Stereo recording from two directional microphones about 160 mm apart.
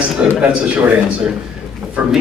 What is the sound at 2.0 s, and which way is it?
Speech, 10° right (ahead or behind).